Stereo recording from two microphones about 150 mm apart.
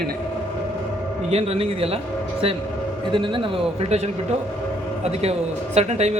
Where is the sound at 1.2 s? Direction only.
45° right (ahead or behind).